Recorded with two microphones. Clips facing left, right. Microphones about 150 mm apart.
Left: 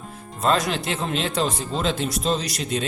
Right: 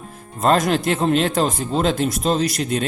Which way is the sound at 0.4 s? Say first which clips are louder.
Right 5 dB; 50° right (ahead or behind).